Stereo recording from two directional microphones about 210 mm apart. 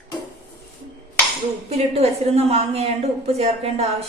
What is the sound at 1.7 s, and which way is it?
A woman's voice, 30° right (ahead or behind).